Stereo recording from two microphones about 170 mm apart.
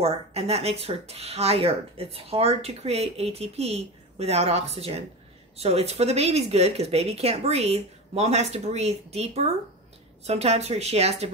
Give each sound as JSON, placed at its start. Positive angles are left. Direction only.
{"t": 0.0, "sound": "speech", "side_deg": -35}